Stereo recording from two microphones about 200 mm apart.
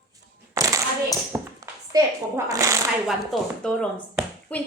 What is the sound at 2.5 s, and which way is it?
Shuffling cards, 15° right (ahead or behind).